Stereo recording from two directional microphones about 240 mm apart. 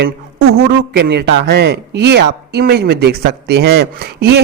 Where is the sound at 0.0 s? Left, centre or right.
Right.